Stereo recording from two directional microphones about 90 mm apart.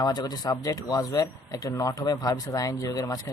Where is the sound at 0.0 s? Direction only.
50° left (ahead or behind).